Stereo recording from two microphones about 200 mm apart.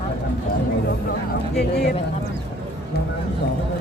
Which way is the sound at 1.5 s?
55° left (ahead or behind).